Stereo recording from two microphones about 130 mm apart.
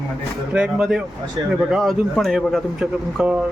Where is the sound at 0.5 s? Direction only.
5° right (ahead or behind).